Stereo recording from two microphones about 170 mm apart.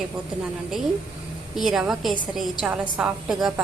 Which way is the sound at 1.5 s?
Centre (ahead or behind).